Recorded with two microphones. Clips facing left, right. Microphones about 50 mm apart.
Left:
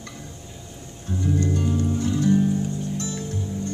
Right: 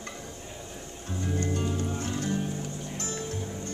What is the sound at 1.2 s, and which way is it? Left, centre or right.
Music, right.